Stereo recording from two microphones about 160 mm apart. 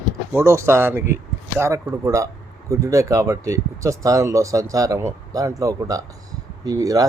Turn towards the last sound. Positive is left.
turn(degrees=-20)  # may be behind; listen again after turning